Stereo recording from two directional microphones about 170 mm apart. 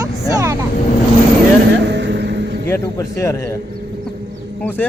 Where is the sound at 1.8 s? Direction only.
90° right.